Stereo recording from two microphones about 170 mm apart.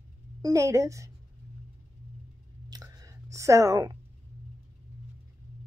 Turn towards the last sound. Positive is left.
turn(degrees=-20)  # may be behind; listen again after turning